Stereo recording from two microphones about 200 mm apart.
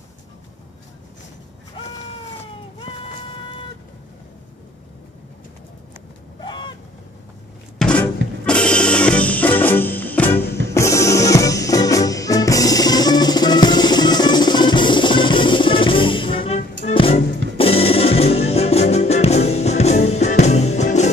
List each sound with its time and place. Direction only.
6.4 s boat: 20° left (ahead or behind)
7.8 s a sound: 5° left (ahead or behind)
8.5 s music: 5° left (ahead or behind); by 21.1 s 35° left (ahead or behind)